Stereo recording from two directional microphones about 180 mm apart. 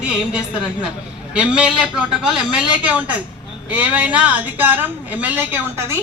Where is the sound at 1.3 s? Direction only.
5° right (ahead or behind).